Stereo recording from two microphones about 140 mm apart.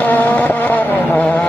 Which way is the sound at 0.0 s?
10° left (ahead or behind).